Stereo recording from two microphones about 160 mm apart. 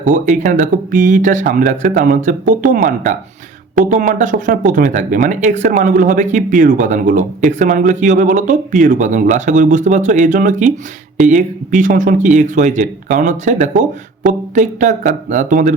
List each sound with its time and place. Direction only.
0.0 s speech: 50° right (ahead or behind)